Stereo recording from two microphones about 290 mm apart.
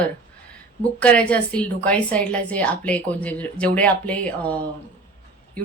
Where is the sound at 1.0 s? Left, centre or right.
Centre.